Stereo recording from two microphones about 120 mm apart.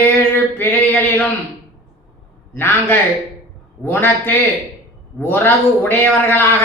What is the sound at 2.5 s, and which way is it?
A man's voice, 20° left (ahead or behind).